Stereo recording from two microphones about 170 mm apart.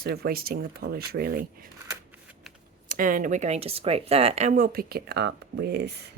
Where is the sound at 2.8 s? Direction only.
55° right (ahead or behind); by 5.9 s 75° right (ahead or behind).